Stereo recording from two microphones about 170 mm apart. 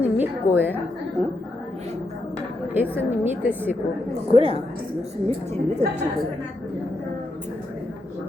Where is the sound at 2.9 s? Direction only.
10° right (ahead or behind).